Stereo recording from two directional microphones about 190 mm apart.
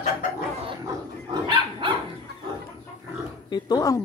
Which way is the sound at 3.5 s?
20° left (ahead or behind).